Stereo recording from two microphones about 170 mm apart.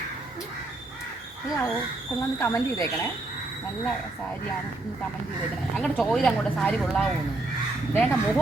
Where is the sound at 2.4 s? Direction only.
20° left (ahead or behind).